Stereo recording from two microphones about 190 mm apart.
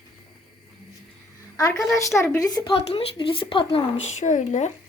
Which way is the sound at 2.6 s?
30° left (ahead or behind).